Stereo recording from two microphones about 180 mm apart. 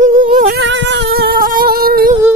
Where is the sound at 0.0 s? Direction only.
40° right (ahead or behind).